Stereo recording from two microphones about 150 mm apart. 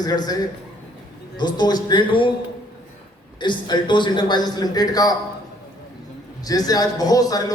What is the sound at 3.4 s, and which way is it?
A woman's voice, 30° left (ahead or behind).